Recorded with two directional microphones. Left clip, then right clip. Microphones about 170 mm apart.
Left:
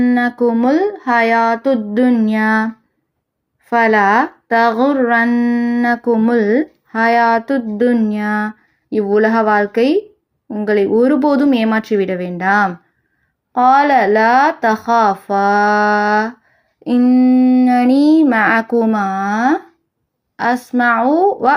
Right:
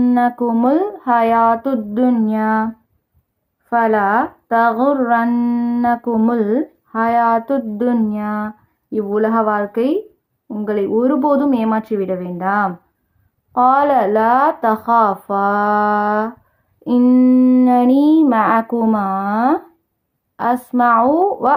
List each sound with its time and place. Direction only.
0.2 s speech: centre (ahead or behind); by 2.6 s 15° left (ahead or behind)
3.7 s speech: 15° left (ahead or behind)
8.1 s speech: 15° left (ahead or behind)
17.0 s a sound: 10° right (ahead or behind)
17.7 s speech: centre (ahead or behind)